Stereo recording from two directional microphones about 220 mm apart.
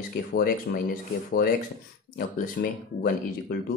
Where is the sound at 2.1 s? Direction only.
40° left (ahead or behind).